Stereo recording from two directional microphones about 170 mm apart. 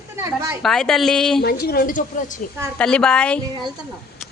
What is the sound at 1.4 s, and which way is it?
Speech, 60° left (ahead or behind).